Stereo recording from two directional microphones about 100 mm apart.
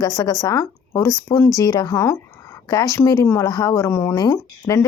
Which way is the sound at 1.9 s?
30° left (ahead or behind).